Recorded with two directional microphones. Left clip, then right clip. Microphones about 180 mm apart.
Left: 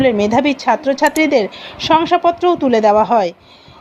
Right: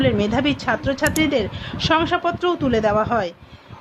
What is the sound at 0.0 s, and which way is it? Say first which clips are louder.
A woman's voice: left 6 dB; 15° left (ahead or behind).